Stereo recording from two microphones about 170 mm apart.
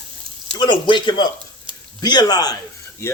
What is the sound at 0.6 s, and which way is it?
Speech, 25° left (ahead or behind).